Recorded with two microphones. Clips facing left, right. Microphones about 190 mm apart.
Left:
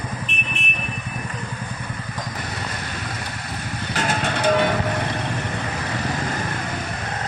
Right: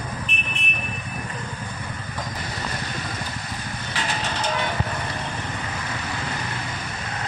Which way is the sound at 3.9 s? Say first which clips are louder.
Left 5 dB; 50° left (ahead or behind).